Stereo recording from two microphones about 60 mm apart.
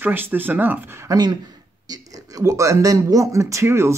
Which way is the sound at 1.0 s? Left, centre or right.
Right.